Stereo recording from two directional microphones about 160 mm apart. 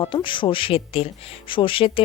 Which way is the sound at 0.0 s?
30° left (ahead or behind).